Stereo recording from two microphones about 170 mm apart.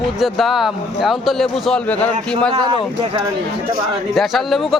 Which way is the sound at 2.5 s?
25° right (ahead or behind).